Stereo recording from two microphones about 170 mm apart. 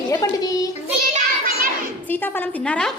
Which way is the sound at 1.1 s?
55° right (ahead or behind).